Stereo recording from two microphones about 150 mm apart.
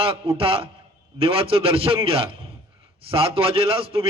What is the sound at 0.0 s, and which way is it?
A man's voice, 40° right (ahead or behind).